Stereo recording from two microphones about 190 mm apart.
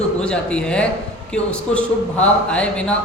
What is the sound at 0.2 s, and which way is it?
Speech, 5° left (ahead or behind).